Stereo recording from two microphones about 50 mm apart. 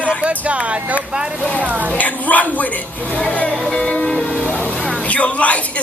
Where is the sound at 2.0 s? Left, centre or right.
Left.